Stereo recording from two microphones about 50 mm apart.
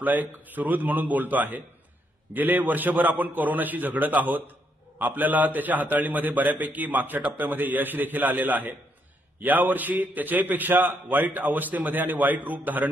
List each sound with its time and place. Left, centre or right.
0.0 s a man's voice: right